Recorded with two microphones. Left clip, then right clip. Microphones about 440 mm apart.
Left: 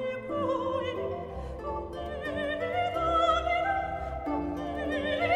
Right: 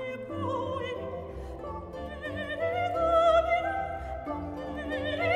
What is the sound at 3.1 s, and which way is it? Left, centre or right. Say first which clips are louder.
Opera: right 4 dB; right.